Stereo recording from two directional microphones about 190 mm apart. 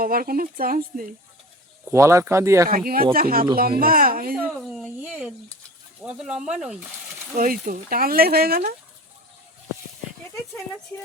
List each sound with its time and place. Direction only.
0.0 s speech: 50° right (ahead or behind)
1.9 s speech: 15° right (ahead or behind)
2.6 s speech: 50° right (ahead or behind)
4.8 s speech: 5° right (ahead or behind)
7.3 s speech: 45° right (ahead or behind)
10.9 s speech: 15° left (ahead or behind)